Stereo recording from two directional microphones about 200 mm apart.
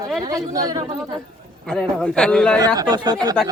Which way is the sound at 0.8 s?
30° right (ahead or behind).